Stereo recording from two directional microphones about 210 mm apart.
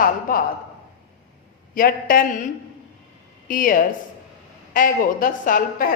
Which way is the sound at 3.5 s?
40° left (ahead or behind).